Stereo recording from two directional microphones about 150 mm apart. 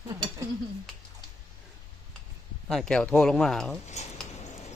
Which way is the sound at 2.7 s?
5° left (ahead or behind).